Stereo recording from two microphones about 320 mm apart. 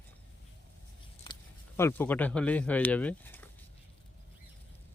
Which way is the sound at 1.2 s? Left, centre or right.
Centre.